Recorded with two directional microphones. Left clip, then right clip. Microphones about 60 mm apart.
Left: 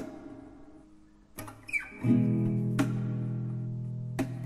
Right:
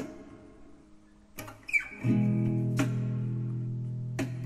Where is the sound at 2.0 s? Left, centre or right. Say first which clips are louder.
Left 2 dB; left.